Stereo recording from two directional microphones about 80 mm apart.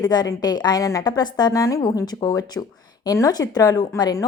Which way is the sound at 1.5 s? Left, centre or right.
Left.